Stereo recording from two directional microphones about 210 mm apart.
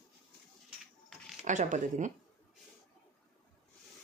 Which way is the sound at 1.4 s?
35° right (ahead or behind).